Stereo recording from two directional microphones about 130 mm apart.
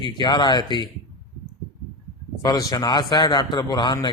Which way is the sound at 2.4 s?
30° left (ahead or behind).